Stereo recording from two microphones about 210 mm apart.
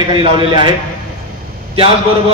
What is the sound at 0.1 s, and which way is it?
Speech, 25° right (ahead or behind).